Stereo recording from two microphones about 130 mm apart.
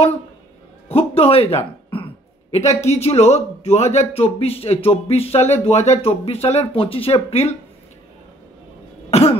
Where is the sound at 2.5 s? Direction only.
55° left (ahead or behind).